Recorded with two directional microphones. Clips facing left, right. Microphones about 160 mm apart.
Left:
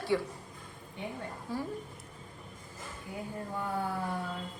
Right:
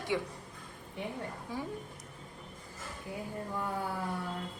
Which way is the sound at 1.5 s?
15° right (ahead or behind).